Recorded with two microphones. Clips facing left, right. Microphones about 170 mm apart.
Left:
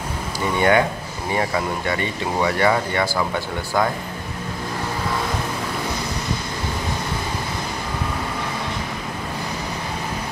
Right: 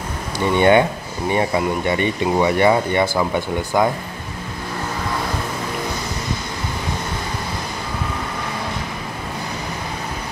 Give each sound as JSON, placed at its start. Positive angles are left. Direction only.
{"t": 0.6, "sound": "speech", "side_deg": -25}